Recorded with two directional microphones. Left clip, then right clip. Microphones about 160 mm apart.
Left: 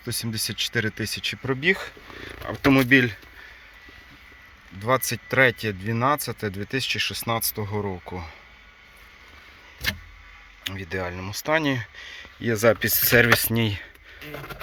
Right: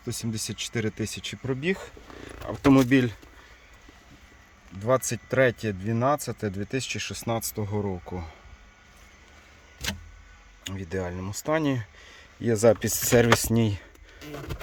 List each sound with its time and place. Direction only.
0.0 s speech: 5° right (ahead or behind)
2.2 s speech: 20° right (ahead or behind)
4.9 s speech: 10° right (ahead or behind)
10.6 s speech: 25° right (ahead or behind)